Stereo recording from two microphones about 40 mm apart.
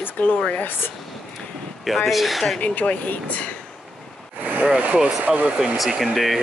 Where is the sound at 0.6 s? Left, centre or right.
Left.